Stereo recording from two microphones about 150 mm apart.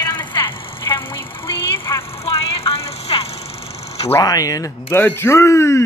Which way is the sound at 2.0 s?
40° left (ahead or behind).